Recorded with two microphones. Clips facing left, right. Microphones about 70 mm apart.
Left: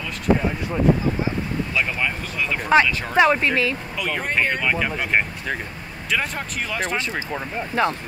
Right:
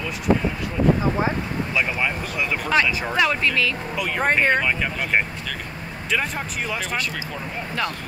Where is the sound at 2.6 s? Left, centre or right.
Left.